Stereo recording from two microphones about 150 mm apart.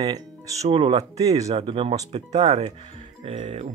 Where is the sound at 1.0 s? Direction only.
25° right (ahead or behind).